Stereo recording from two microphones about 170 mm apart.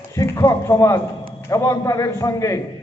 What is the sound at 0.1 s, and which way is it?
A man's voice, 20° left (ahead or behind).